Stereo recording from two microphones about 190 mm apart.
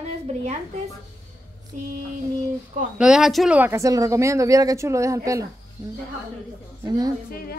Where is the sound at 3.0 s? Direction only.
5° right (ahead or behind).